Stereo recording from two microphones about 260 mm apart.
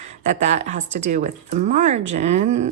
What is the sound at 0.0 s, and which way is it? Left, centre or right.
Speech, right.